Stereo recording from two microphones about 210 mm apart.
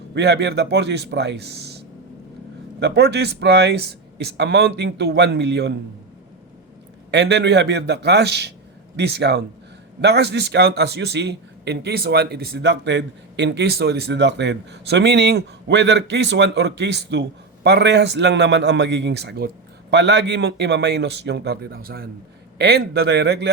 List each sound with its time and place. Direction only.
0.1 s a man's voice: 55° right (ahead or behind)
2.8 s a man's voice: 50° right (ahead or behind)
7.1 s a man's voice: 55° right (ahead or behind)